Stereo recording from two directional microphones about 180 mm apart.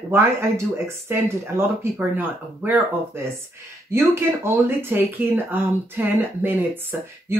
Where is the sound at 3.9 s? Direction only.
15° right (ahead or behind).